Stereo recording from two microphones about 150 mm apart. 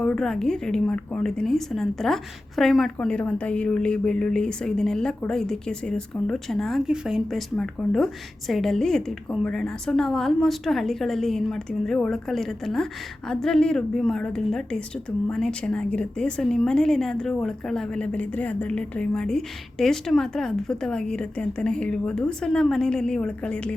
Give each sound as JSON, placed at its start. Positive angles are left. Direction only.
{"t": 0.0, "sound": "a woman's voice", "side_deg": 5}